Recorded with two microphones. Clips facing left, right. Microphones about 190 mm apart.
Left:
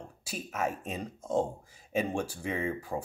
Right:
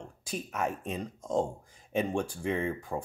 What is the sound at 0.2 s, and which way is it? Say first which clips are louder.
Speech: even; 5° left (ahead or behind).